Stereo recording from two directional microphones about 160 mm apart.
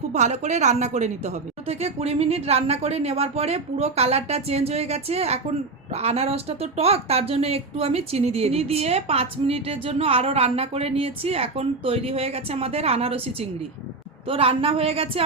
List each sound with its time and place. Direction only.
0.1 s a woman's voice: 45° right (ahead or behind)